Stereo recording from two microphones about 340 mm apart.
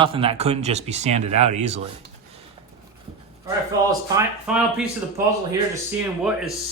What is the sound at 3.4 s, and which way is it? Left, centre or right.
Speech, centre.